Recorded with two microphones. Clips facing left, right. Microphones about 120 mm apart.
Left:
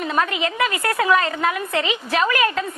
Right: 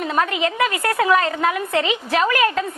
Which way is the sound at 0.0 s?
40° right (ahead or behind).